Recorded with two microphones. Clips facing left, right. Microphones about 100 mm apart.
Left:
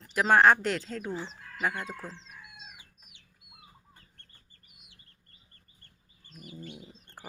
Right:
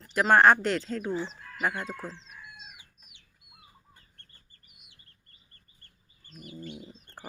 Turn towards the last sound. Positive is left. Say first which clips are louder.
# right 2 dB
turn(degrees=10)  # may be behind; listen again after turning